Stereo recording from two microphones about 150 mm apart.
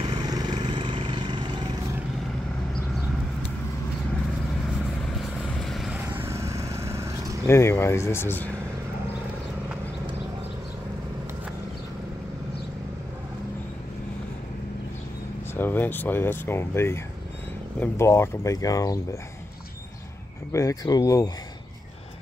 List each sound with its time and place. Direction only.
0.0 s vehicle: 30° right (ahead or behind)
5.5 s vehicle: centre (ahead or behind)
6.0 s vehicle: 15° right (ahead or behind)
7.4 s speech: 15° left (ahead or behind)
15.5 s speech: 15° left (ahead or behind)
20.5 s speech: 25° left (ahead or behind)